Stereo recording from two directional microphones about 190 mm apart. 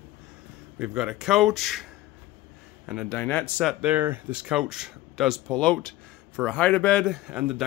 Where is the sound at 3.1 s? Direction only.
10° left (ahead or behind).